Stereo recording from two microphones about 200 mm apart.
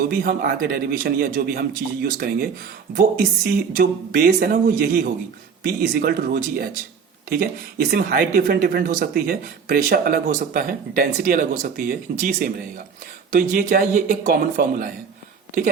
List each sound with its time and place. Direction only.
0.1 s speech: 50° right (ahead or behind)
7.9 s speech: 50° right (ahead or behind)